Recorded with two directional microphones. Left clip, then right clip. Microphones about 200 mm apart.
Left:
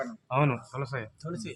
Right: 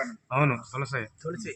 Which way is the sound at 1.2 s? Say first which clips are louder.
Right 4 dB; 75° left (ahead or behind).